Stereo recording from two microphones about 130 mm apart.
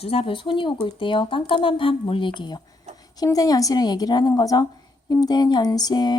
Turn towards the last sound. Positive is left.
turn(degrees=35)  # may be behind; listen again after turning